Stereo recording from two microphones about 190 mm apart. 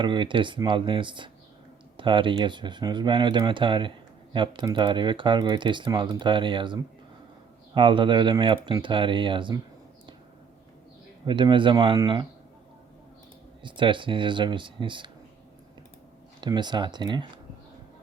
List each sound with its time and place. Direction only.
0.0 s speech: 25° right (ahead or behind)
11.3 s speech: 25° right (ahead or behind)
13.6 s speech: 25° right (ahead or behind)
16.4 s speech: 25° right (ahead or behind)